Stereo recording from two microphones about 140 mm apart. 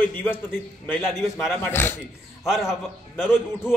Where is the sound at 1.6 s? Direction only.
15° left (ahead or behind).